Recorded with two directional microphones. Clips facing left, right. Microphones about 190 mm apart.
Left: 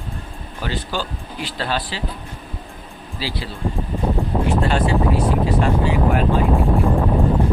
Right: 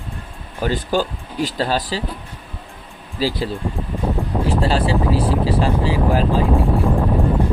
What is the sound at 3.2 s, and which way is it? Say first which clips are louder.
Speech: right 7 dB; 45° right (ahead or behind).